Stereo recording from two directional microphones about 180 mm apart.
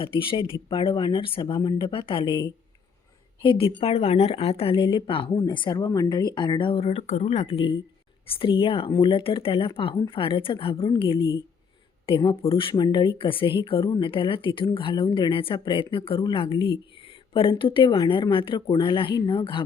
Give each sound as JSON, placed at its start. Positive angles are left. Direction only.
{"t": 0.0, "sound": "speech", "side_deg": 30}